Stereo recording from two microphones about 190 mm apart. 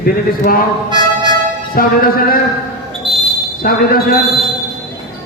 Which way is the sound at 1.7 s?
50° left (ahead or behind).